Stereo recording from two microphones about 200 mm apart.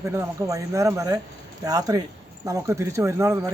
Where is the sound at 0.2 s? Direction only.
15° right (ahead or behind).